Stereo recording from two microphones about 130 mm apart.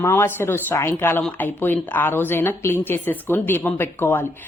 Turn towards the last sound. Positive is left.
turn(degrees=15)  # may be behind; listen again after turning